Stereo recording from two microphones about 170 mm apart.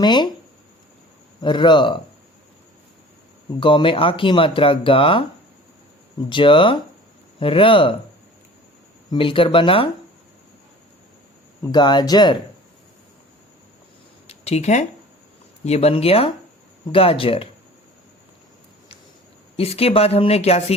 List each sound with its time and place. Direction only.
0.0 s speech: 25° left (ahead or behind)
1.4 s speech: 25° left (ahead or behind)
3.6 s speech: 30° left (ahead or behind)
6.2 s speech: 30° left (ahead or behind)
9.0 s speech: 30° left (ahead or behind)
11.6 s speech: 25° left (ahead or behind)
14.3 s a sound: 40° left (ahead or behind)
15.6 s speech: 40° left (ahead or behind)
19.5 s speech: 35° left (ahead or behind)